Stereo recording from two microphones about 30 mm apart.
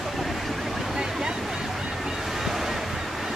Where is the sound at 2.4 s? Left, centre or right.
Centre.